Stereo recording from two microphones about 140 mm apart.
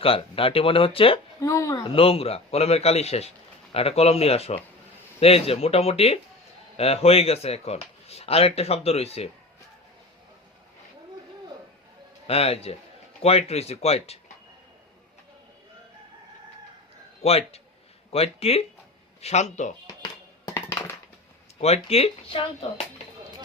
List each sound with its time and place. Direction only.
0.0 s speech: 40° left (ahead or behind)
1.4 s speech: 25° left (ahead or behind)
1.8 s a man's voice: 40° left (ahead or behind)
12.3 s a man's voice: 45° left (ahead or behind)
17.2 s a man's voice: 45° left (ahead or behind)
20.4 s a sound: 25° left (ahead or behind)
21.6 s a man's voice: 45° left (ahead or behind)